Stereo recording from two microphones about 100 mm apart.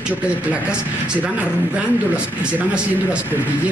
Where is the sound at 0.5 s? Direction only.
10° right (ahead or behind).